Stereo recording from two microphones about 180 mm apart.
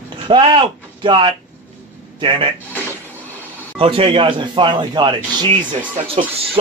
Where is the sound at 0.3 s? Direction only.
30° right (ahead or behind).